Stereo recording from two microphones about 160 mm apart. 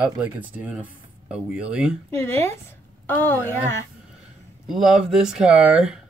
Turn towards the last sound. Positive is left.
turn(degrees=-5)  # may be behind; listen again after turning